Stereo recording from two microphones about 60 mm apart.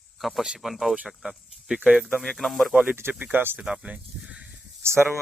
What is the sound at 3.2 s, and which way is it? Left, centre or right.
Speech, right.